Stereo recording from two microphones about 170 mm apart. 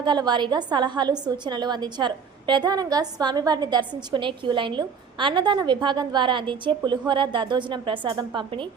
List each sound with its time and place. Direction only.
0.0 s a woman's voice: 25° right (ahead or behind)